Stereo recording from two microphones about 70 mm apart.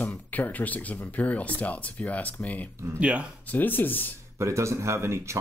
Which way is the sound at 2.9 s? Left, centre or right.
Centre.